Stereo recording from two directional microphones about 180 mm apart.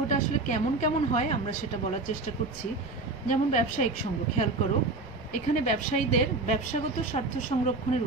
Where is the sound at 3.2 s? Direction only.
45° left (ahead or behind).